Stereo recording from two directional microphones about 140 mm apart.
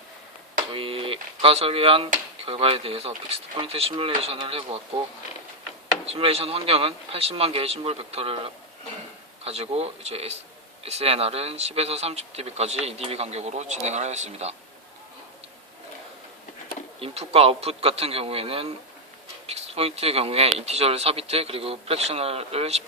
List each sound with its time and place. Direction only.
0.7 s speech: 40° right (ahead or behind)
6.1 s speech: 45° right (ahead or behind)
17.0 s speech: 45° right (ahead or behind)